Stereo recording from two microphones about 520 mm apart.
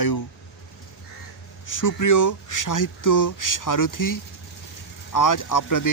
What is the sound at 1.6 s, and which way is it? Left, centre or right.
Speech, left.